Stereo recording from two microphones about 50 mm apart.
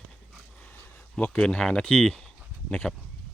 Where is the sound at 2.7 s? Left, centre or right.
Left.